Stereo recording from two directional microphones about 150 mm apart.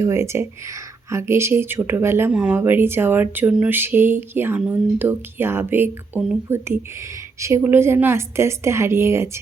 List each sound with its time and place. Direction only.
0.0 s speech: 20° right (ahead or behind)